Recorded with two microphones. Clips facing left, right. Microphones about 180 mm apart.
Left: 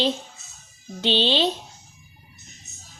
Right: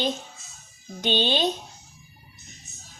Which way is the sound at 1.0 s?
25° left (ahead or behind).